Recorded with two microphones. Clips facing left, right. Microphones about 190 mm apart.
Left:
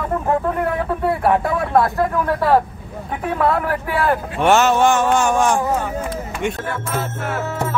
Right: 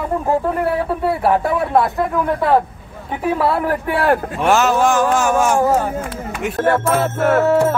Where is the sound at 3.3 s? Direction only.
10° right (ahead or behind).